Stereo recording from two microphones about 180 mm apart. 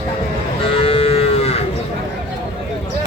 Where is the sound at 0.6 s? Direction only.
30° left (ahead or behind).